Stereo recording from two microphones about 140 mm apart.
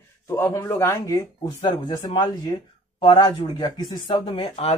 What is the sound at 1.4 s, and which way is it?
Speech, 35° left (ahead or behind).